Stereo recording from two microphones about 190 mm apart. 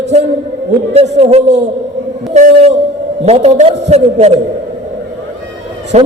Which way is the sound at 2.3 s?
35° right (ahead or behind).